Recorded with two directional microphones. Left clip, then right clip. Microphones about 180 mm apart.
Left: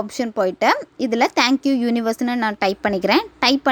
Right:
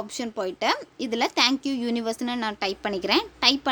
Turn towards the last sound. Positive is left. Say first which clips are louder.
# left 4 dB
turn(degrees=35)  # may be behind; listen again after turning